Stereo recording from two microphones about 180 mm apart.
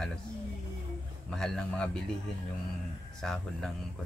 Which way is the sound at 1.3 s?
Centre (ahead or behind).